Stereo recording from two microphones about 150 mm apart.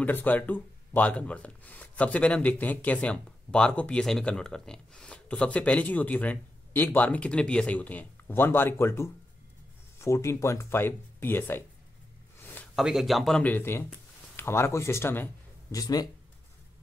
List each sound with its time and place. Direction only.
0.0 s speech: 10° left (ahead or behind)
12.4 s a sound: 15° left (ahead or behind)
12.7 s speech: centre (ahead or behind); by 16.1 s 25° left (ahead or behind)